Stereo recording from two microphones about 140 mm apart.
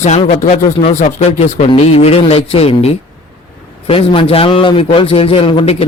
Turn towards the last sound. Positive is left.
turn(degrees=40)  # may be behind; listen again after turning